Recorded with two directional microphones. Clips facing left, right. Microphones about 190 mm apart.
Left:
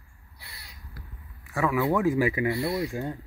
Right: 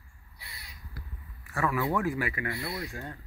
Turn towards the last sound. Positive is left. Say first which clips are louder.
# left 8 dB
turn(degrees=20)  # may be behind; listen again after turning